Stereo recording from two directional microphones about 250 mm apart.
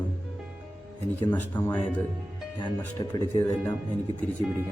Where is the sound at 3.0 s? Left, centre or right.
Centre.